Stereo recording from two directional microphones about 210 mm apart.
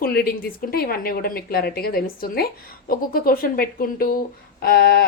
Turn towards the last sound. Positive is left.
turn(degrees=45)  # may be behind; listen again after turning